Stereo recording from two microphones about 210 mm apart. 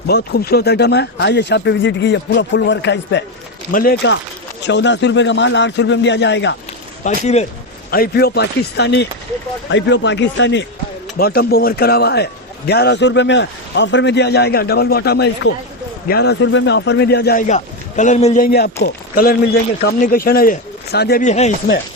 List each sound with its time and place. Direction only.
0.1 s speech: 50° left (ahead or behind)
3.7 s a man's voice: 45° left (ahead or behind)
4.6 s speech: 55° left (ahead or behind)
7.1 s a man's voice: 35° left (ahead or behind); by 10.7 s 60° left (ahead or behind)
11.2 s a man's voice: 45° left (ahead or behind)
17.4 s a man's voice: 35° left (ahead or behind)
18.4 s a man's voice: 50° left (ahead or behind)
21.2 s speech: 35° left (ahead or behind)